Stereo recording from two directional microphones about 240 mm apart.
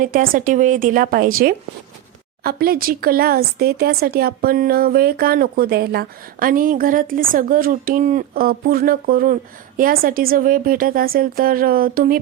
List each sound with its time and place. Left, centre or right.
0.0 s speech: right